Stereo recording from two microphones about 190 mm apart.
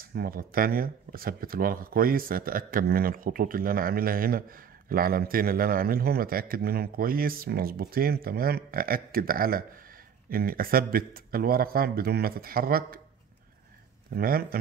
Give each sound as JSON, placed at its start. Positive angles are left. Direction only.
{"t": 0.0, "sound": "speech", "side_deg": -50}
{"t": 14.1, "sound": "speech", "side_deg": -50}